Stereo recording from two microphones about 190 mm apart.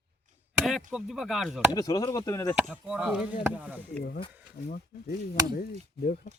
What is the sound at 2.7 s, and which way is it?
Speech, 5° right (ahead or behind).